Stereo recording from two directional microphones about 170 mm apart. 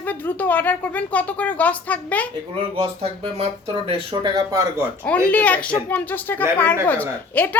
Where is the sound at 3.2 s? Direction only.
35° right (ahead or behind).